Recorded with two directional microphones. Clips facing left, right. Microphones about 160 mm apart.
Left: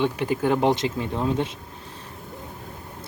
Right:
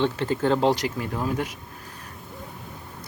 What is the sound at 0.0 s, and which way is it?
Speech, 15° left (ahead or behind).